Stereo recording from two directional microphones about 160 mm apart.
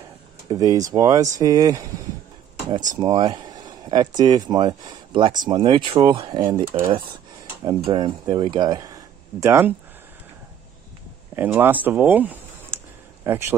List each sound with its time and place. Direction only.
0.5 s speech: 25° right (ahead or behind)
3.0 s speech: 25° right (ahead or behind)
11.3 s a sound: 15° right (ahead or behind)